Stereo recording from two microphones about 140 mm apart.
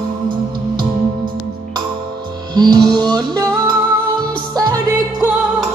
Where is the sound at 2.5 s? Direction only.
30° right (ahead or behind).